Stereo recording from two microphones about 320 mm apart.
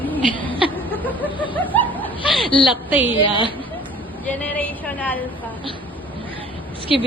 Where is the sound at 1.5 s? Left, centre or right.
Centre.